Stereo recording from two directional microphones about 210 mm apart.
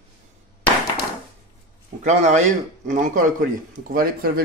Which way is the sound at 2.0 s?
35° right (ahead or behind).